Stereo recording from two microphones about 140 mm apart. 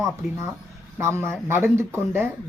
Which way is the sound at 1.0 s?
20° right (ahead or behind).